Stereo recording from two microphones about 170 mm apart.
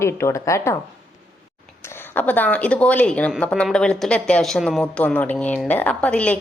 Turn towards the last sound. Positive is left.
turn(degrees=10)  # may be behind; listen again after turning